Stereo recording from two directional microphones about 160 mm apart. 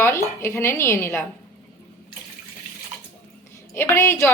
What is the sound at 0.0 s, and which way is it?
A woman's voice, 15° left (ahead or behind).